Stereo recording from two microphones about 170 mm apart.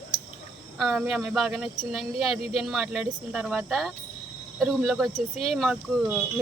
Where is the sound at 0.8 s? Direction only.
5° right (ahead or behind).